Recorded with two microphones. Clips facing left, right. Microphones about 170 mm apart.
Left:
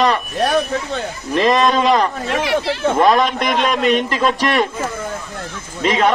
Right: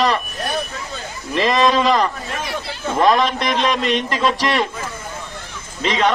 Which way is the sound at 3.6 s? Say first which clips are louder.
Left 4 dB; centre (ahead or behind).